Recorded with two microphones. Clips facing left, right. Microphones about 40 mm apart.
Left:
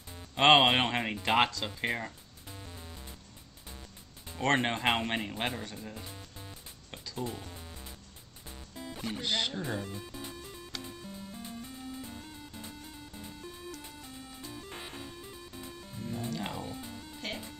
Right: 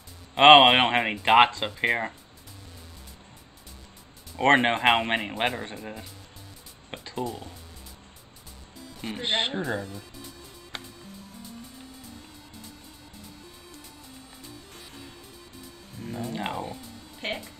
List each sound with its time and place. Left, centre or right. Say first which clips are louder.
0.3 s speech: right 8 dB; right
4.4 s speech: right 8 dB; right
6.9 s a sound: right 6 dB; right
8.7 s music: left 3 dB; left
9.0 s speech: right 5 dB; right
9.8 s speech: even; left
12.0 s music: left 2 dB; left
14.5 s music: left 4 dB; left
16.0 s speech: right 4 dB; right
16.7 s music: even; left
17.2 s speech: right 7 dB; right